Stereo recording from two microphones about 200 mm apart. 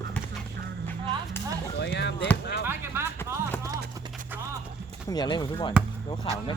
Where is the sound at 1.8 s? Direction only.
60° left (ahead or behind).